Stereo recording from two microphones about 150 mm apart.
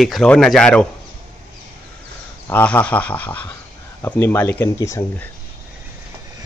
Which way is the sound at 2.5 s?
10° left (ahead or behind).